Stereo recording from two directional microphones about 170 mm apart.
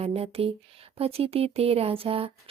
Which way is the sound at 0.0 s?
35° right (ahead or behind).